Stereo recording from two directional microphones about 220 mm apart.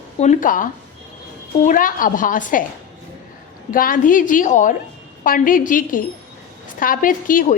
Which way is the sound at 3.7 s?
40° left (ahead or behind).